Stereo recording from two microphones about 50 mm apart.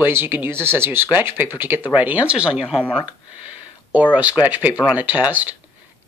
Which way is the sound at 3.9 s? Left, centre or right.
Right.